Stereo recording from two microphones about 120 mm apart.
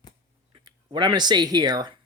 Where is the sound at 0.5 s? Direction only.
40° right (ahead or behind).